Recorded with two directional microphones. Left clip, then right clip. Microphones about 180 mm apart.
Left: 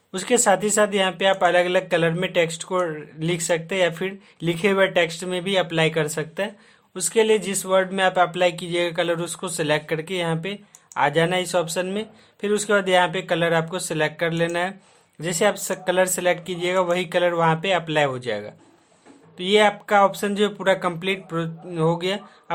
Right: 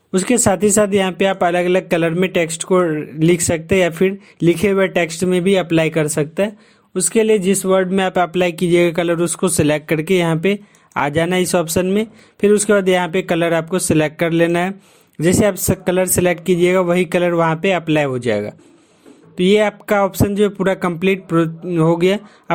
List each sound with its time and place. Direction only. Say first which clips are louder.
0.1 s speech: right 3 dB; 30° right (ahead or behind)